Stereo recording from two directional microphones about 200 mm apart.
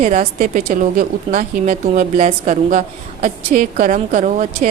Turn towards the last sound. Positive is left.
turn(degrees=-40)  # may be behind; listen again after turning